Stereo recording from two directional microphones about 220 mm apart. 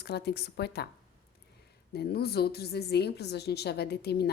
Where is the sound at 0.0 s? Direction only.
50° left (ahead or behind).